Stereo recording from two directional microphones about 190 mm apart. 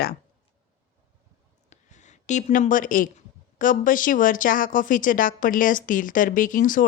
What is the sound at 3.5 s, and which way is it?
Speech, 45° left (ahead or behind).